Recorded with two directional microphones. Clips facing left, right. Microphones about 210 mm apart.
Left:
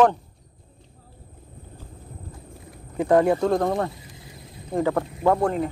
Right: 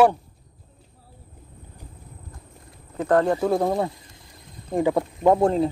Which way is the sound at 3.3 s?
5° right (ahead or behind).